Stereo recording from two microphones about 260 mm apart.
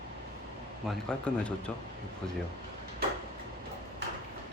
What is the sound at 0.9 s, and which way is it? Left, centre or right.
Speech, centre.